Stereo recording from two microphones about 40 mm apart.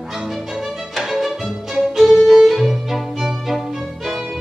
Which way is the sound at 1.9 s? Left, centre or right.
Centre.